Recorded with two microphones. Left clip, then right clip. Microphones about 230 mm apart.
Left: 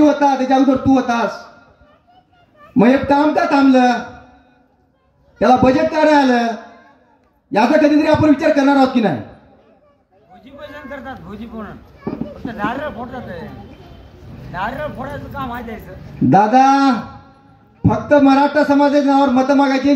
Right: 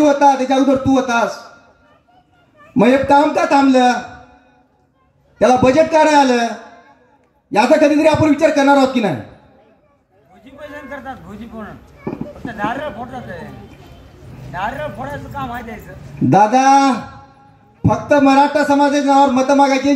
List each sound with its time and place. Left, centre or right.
0.0 s a man's voice: right
2.7 s a man's voice: right
5.4 s a man's voice: right
7.5 s a man's voice: right
10.4 s a sound: centre
12.4 s speech: centre
14.5 s speech: centre
16.3 s a man's voice: right